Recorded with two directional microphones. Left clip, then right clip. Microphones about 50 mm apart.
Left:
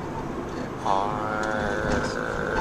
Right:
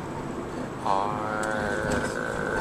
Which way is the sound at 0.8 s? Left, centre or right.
Centre.